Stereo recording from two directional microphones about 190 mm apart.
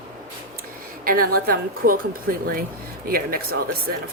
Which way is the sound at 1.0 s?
50° right (ahead or behind).